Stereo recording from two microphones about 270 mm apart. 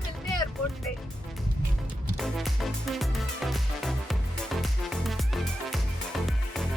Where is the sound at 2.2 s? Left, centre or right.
Centre.